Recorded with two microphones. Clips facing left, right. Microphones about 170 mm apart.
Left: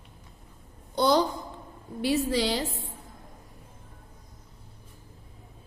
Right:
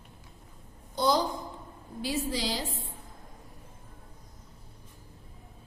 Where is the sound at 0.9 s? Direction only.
65° left (ahead or behind).